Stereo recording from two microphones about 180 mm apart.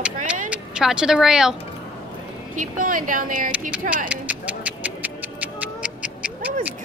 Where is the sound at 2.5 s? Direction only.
45° right (ahead or behind).